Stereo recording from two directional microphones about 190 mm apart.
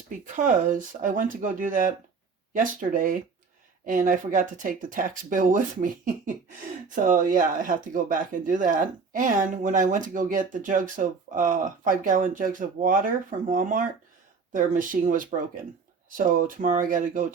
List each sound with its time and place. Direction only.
0.3 s speech: 40° right (ahead or behind)